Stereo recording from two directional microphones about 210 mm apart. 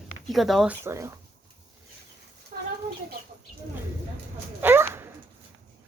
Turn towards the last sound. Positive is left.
turn(degrees=-10)  # may be behind; listen again after turning